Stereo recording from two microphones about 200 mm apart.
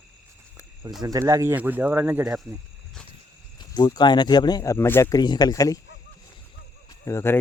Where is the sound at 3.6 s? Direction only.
20° left (ahead or behind).